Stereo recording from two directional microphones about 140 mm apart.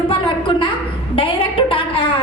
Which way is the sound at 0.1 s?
40° left (ahead or behind).